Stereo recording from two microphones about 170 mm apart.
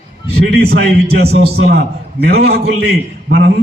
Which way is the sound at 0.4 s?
70° right (ahead or behind).